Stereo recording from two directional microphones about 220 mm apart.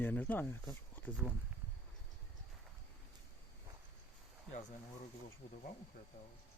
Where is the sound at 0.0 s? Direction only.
10° left (ahead or behind).